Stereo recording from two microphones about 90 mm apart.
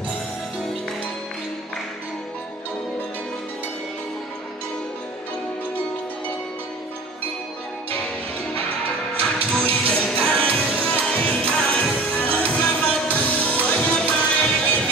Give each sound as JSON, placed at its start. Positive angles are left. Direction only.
{"t": 9.6, "sound": "music", "side_deg": 15}